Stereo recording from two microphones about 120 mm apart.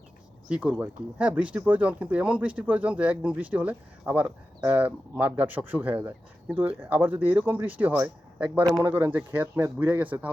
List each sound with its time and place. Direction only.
0.4 s speech: 10° right (ahead or behind)